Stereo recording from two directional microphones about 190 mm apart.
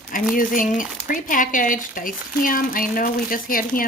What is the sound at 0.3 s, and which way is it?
Speech, 45° left (ahead or behind).